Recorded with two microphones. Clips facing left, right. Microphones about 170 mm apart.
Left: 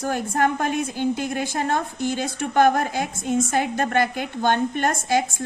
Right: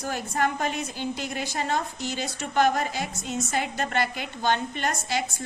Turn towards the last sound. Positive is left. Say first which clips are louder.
# left 7 dB
turn(degrees=50)  # may be behind; listen again after turning